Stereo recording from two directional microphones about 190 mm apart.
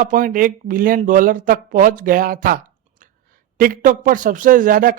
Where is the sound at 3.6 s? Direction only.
50° right (ahead or behind).